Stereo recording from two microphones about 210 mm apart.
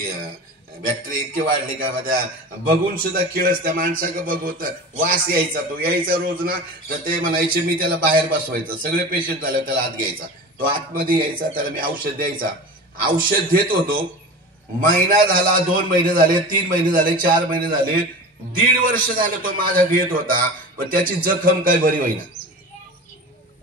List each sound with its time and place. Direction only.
1.0 s a man's voice: 40° right (ahead or behind)